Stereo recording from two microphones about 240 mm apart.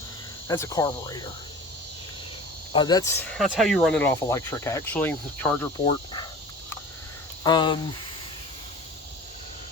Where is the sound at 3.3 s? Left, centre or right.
Centre.